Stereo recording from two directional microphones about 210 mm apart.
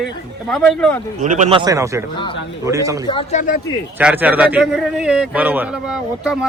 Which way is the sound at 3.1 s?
25° left (ahead or behind).